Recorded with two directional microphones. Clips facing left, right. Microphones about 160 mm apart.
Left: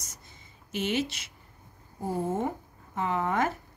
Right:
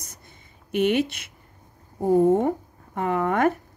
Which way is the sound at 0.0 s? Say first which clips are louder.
Right 3 dB; 55° right (ahead or behind).